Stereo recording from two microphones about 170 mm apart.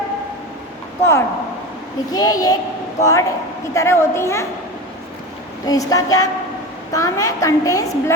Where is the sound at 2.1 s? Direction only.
20° left (ahead or behind).